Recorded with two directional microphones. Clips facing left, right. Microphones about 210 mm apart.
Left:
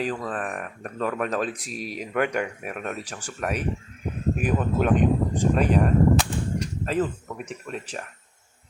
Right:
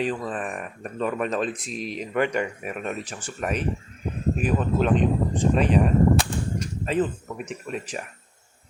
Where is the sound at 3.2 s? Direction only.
15° left (ahead or behind).